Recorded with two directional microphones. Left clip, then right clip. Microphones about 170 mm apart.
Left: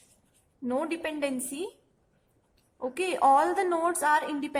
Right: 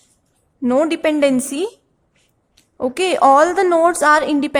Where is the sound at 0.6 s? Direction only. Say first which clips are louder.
Right 15 dB; 30° right (ahead or behind).